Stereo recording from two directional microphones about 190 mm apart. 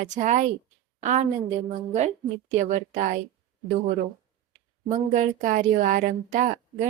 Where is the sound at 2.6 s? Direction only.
40° right (ahead or behind).